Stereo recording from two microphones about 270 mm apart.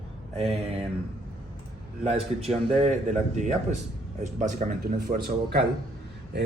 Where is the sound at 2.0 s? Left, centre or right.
Right.